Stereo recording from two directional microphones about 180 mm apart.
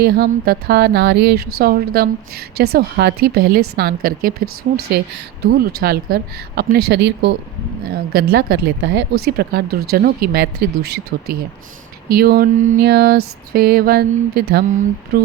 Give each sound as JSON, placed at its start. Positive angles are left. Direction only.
{"t": 0.0, "sound": "speech", "side_deg": -60}
{"t": 7.9, "sound": "speech", "side_deg": -55}